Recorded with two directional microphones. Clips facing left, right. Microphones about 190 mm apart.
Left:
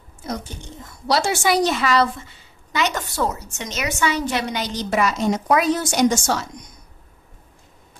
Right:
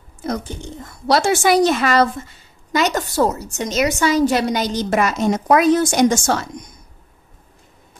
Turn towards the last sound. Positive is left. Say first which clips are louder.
# right 3 dB
turn(degrees=-55)  # may be behind; listen again after turning